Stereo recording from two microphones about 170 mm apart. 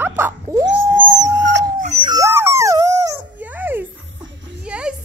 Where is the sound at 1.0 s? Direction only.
90° right.